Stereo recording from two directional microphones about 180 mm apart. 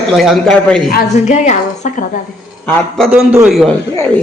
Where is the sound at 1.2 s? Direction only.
40° left (ahead or behind).